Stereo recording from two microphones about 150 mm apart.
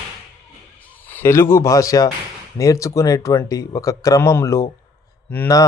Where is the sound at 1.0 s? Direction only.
15° left (ahead or behind).